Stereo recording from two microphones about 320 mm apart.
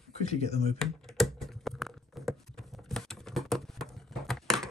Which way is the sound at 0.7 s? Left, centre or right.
Centre.